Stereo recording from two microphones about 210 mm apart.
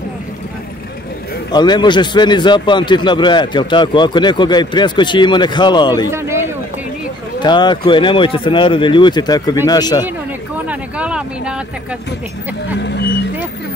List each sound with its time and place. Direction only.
1.5 s a man's voice: 20° left (ahead or behind)
6.0 s speech: 10° right (ahead or behind)
7.3 s a man's voice: 20° left (ahead or behind)
10.7 s a sound: 5° right (ahead or behind)
12.8 s speech: 55° left (ahead or behind)